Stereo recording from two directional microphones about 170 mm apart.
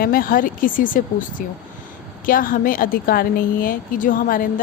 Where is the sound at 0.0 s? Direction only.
55° left (ahead or behind).